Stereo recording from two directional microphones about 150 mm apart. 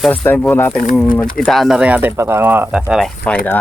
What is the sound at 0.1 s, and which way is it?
Speech, 10° left (ahead or behind).